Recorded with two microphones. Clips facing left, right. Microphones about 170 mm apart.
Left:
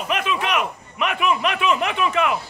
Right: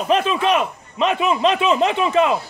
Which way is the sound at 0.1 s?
30° right (ahead or behind).